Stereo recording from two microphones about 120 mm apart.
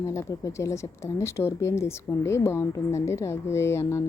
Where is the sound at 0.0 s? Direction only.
25° left (ahead or behind).